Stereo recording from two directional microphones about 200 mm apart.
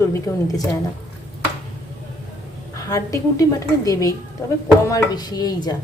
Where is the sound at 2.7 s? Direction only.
15° left (ahead or behind).